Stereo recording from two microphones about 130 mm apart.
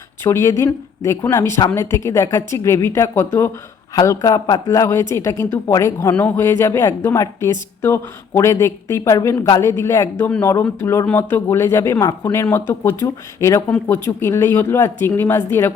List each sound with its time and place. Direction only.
0.3 s a woman's voice: 20° left (ahead or behind)